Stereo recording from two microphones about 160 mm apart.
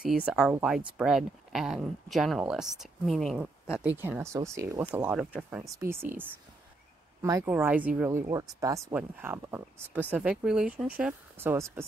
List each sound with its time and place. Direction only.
0.0 s speech: 5° right (ahead or behind)